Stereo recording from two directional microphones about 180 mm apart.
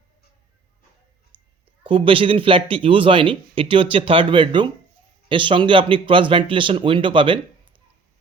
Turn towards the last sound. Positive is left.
turn(degrees=-30)  # may be behind; listen again after turning